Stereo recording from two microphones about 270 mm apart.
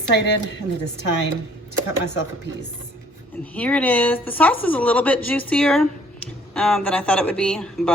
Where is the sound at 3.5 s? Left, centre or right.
Centre.